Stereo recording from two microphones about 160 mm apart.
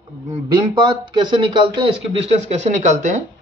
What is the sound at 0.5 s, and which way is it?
A man's voice, 30° right (ahead or behind).